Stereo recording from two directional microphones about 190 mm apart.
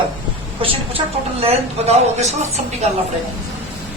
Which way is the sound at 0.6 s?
30° right (ahead or behind).